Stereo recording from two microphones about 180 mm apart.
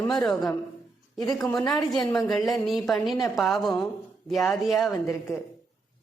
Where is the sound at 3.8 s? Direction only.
Centre (ahead or behind).